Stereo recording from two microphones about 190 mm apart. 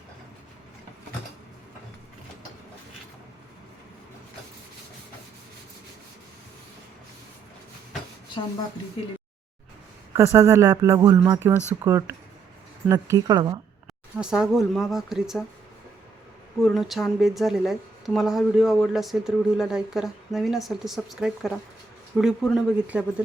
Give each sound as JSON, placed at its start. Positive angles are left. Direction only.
{"t": 10.2, "sound": "speech", "side_deg": -15}
{"t": 14.2, "sound": "a woman's voice", "side_deg": -5}
{"t": 16.6, "sound": "a woman's voice", "side_deg": 0}